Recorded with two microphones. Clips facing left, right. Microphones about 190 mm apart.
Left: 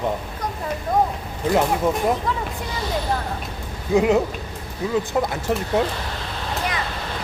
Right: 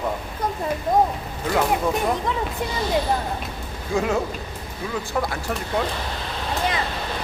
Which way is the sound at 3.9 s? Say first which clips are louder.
Left 6 dB; 20° left (ahead or behind).